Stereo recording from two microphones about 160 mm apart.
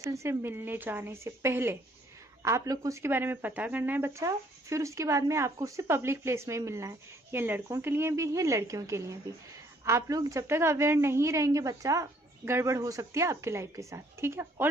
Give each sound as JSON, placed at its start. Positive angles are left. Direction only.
{"t": 0.0, "sound": "speech", "side_deg": -20}